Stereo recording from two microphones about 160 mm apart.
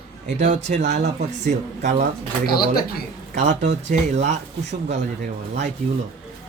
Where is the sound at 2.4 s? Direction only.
70° left (ahead or behind).